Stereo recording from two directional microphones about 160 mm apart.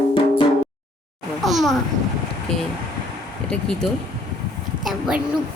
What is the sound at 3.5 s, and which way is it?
A child's voice, 5° left (ahead or behind).